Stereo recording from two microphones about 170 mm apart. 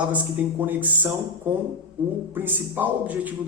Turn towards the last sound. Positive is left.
turn(degrees=-10)  # may be behind; listen again after turning